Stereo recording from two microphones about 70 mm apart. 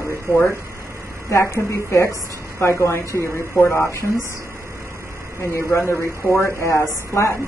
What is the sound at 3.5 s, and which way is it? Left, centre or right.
Speech, left.